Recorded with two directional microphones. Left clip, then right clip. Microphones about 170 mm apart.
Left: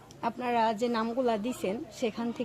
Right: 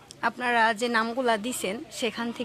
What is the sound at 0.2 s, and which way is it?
A woman's voice, 5° left (ahead or behind).